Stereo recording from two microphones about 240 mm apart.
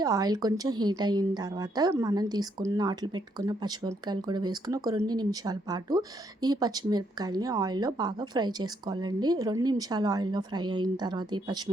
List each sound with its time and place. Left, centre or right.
0.0 s a woman's voice: centre